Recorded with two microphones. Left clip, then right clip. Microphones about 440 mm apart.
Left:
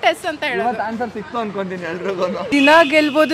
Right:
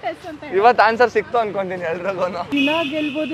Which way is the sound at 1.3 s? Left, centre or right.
Right.